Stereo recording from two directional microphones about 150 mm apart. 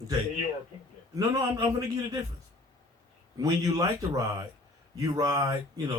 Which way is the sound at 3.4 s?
25° right (ahead or behind).